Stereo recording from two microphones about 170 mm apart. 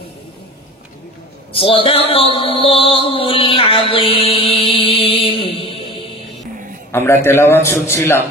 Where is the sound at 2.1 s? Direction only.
35° left (ahead or behind).